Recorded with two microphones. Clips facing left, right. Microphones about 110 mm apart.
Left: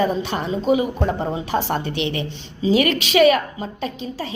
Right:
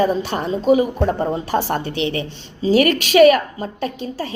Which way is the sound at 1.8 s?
35° right (ahead or behind).